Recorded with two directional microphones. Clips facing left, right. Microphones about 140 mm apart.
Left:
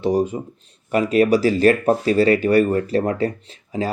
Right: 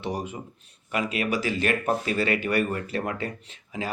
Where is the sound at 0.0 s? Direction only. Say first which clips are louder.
Left 12 dB; 35° left (ahead or behind).